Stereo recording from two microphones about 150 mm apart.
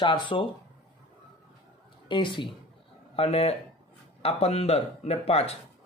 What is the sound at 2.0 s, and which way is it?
A man's voice, 30° left (ahead or behind).